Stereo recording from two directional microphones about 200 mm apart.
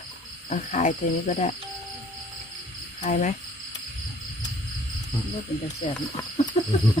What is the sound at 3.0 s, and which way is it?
Speech, 40° left (ahead or behind).